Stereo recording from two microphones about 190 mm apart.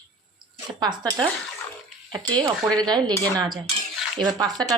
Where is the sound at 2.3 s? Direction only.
20° right (ahead or behind).